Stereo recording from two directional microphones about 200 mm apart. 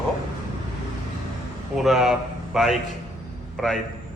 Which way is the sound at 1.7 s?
Centre (ahead or behind).